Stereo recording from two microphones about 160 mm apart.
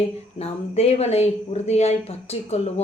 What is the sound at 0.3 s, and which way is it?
A woman's voice, 40° left (ahead or behind).